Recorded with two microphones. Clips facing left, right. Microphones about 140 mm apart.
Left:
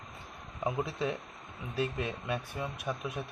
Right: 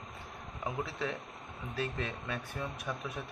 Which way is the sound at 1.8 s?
15° left (ahead or behind).